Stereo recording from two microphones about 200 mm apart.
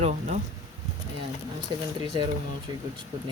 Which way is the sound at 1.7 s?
20° right (ahead or behind).